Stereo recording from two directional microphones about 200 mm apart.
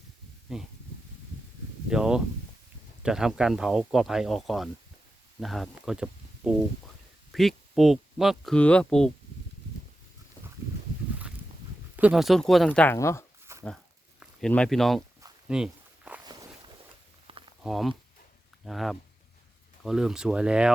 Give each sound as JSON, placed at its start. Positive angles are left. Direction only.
{"t": 0.5, "sound": "speech", "side_deg": 0}
{"t": 1.9, "sound": "speech", "side_deg": -5}
{"t": 11.9, "sound": "speech", "side_deg": -5}
{"t": 13.5, "sound": "a sound", "side_deg": -15}
{"t": 14.2, "sound": "speech", "side_deg": 5}
{"t": 15.4, "sound": "walk", "side_deg": -5}
{"t": 16.2, "sound": "walk", "side_deg": -20}
{"t": 17.2, "sound": "a sound", "side_deg": -25}
{"t": 17.6, "sound": "speech", "side_deg": 0}